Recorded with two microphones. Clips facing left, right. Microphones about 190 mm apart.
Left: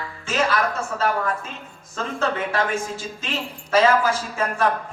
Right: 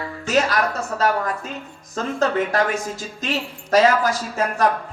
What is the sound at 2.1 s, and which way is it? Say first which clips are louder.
A woman's voice: right 4 dB; 40° right (ahead or behind).